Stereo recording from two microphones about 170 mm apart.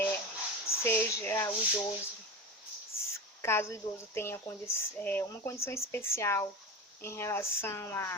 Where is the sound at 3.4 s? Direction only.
15° left (ahead or behind).